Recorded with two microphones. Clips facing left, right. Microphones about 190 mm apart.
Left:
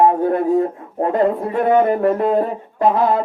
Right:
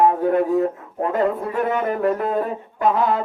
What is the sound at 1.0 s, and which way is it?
Speech, 30° left (ahead or behind).